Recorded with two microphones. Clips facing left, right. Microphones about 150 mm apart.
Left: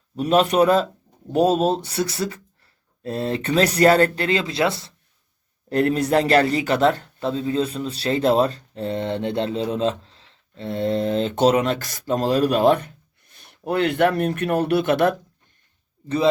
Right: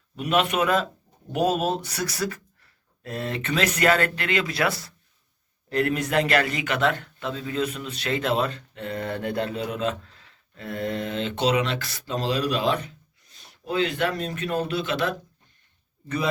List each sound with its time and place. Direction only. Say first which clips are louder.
0.2 s a man's voice: left 6 dB; 35° left (ahead or behind); by 15.1 s 55° left (ahead or behind)
16.0 s speech: left 8 dB; 30° left (ahead or behind)